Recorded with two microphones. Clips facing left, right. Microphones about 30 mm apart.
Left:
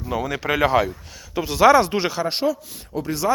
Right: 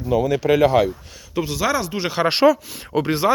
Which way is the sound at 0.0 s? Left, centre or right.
Centre.